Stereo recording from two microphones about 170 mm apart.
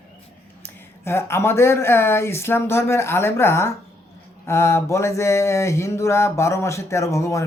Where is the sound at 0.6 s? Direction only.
15° left (ahead or behind).